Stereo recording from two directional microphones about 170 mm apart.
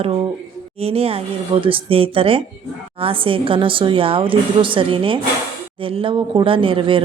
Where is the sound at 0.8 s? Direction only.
35° right (ahead or behind).